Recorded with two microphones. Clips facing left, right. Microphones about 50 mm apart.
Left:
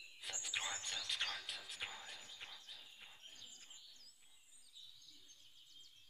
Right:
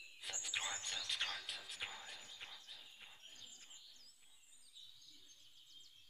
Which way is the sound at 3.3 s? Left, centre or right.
Right.